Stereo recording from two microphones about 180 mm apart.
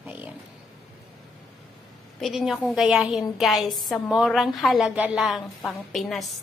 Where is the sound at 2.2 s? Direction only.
Centre (ahead or behind).